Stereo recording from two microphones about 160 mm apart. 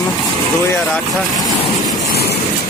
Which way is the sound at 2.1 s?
75° left (ahead or behind).